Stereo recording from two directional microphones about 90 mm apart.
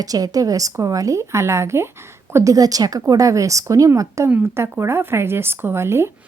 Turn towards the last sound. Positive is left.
turn(degrees=-30)  # may be behind; listen again after turning